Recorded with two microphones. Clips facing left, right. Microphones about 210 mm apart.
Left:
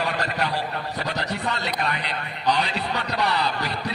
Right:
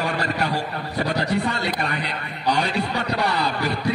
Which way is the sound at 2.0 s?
45° right (ahead or behind).